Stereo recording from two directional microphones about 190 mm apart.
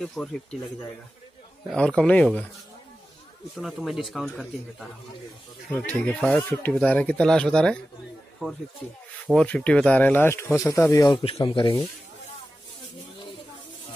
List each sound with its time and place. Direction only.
0.0 s speech: 5° left (ahead or behind)
3.5 s speech: centre (ahead or behind)
9.3 s speech: 5° left (ahead or behind)
11.2 s speech: 30° left (ahead or behind)